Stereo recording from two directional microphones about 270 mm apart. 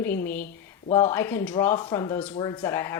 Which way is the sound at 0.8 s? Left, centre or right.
Centre.